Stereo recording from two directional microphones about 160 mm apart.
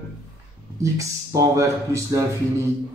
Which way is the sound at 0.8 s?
20° right (ahead or behind).